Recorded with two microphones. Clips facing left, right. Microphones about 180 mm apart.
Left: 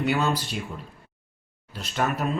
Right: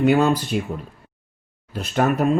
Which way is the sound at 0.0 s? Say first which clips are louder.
Right 8 dB; 50° right (ahead or behind).